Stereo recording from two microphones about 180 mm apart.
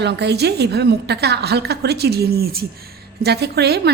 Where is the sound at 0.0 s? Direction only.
65° right (ahead or behind).